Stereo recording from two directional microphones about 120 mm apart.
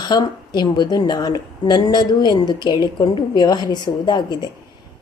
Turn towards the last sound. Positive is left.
turn(degrees=40)  # may be behind; listen again after turning